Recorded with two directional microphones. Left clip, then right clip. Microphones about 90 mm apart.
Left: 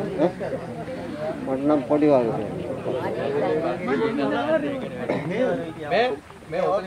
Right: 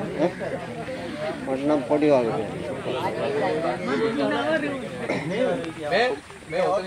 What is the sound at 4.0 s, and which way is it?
Speech, 30° left (ahead or behind).